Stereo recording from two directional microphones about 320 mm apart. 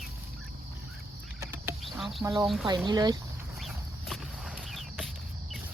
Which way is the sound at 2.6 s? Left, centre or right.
Centre.